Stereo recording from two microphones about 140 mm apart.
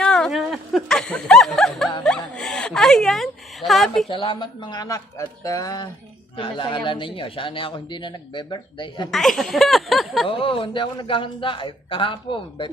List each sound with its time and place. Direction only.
0.0 s a sound: 5° left (ahead or behind)
4.1 s a man's voice: 35° left (ahead or behind)
6.3 s speech: 40° left (ahead or behind)
9.1 s speech: centre (ahead or behind)
10.2 s speech: 40° left (ahead or behind)